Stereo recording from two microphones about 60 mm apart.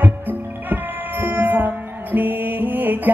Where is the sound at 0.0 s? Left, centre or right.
Right.